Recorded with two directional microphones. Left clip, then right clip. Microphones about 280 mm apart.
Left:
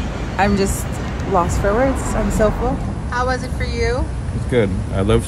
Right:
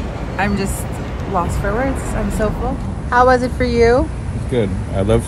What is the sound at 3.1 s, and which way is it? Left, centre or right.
A woman's voice, centre.